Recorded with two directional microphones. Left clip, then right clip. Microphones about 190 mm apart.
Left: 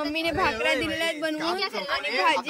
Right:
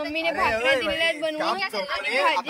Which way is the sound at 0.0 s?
15° left (ahead or behind).